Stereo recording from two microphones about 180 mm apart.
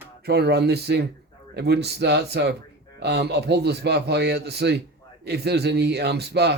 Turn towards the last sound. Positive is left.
turn(degrees=-65)  # may be behind; listen again after turning